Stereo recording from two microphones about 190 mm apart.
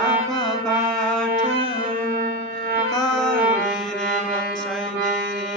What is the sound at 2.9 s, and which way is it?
Music, 5° left (ahead or behind).